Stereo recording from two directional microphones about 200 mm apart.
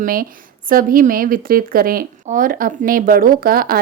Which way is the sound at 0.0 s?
45° right (ahead or behind).